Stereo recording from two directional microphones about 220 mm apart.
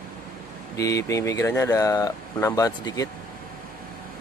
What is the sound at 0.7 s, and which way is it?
Speech, 15° left (ahead or behind).